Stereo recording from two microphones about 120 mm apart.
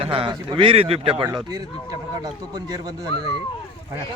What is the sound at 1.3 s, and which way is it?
Speech, 30° right (ahead or behind).